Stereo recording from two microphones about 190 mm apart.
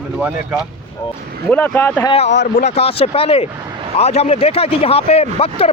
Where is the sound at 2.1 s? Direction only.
35° left (ahead or behind).